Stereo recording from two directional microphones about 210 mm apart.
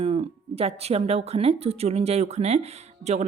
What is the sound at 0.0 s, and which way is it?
Speech, 30° right (ahead or behind).